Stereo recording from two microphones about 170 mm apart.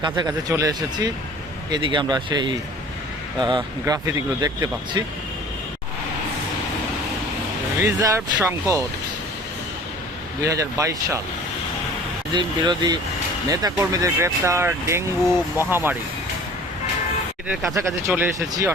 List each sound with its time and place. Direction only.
0.0 s speech: 25° right (ahead or behind)
7.8 s speech: 15° right (ahead or behind)
10.4 s speech: 20° right (ahead or behind)
12.3 s speech: 25° right (ahead or behind)
17.5 s speech: centre (ahead or behind)
17.7 s speech: 15° right (ahead or behind)